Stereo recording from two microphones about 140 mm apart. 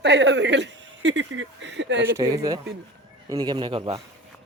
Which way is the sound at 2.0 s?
20° right (ahead or behind).